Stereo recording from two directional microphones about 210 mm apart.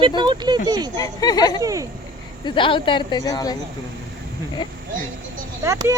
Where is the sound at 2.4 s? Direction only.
20° left (ahead or behind).